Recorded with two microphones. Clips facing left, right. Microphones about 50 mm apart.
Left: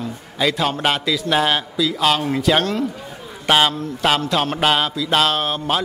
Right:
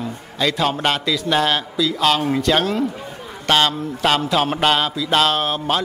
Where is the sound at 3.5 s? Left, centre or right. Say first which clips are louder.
Left 1 dB; centre.